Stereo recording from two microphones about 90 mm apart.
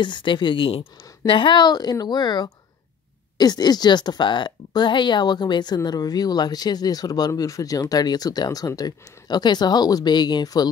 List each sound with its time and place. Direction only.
0.0 s speech: 60° left (ahead or behind); by 1.0 s 85° left
1.2 s speech: 70° left (ahead or behind); by 10.7 s 45° left (ahead or behind)